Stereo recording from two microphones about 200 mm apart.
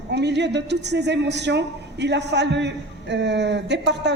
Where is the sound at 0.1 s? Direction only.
60° right (ahead or behind).